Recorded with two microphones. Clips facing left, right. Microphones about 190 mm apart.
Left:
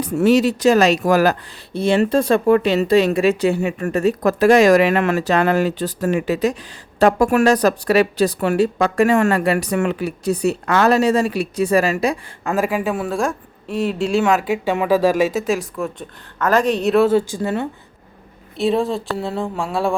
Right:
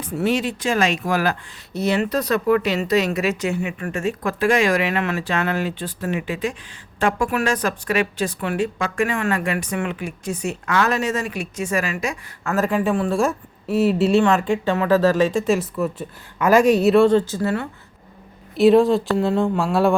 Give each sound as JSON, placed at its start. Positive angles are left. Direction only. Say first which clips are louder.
{"t": 0.0, "sound": "speech", "louder": "left 7 dB", "side_deg": 40}
{"t": 1.7, "sound": "speech", "louder": "left 5 dB", "side_deg": 30}
{"t": 12.5, "sound": "speech", "louder": "even", "side_deg": 10}
{"t": 18.5, "sound": "speech", "louder": "right 5 dB", "side_deg": 0}